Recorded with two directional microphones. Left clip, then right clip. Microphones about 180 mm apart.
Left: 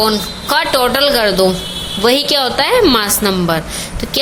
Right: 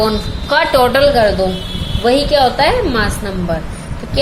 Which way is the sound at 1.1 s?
25° left (ahead or behind).